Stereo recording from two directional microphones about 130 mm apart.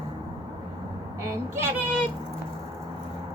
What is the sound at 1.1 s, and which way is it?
Speech, 20° right (ahead or behind).